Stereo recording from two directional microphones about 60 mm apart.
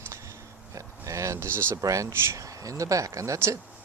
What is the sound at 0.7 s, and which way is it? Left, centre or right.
Speech, right.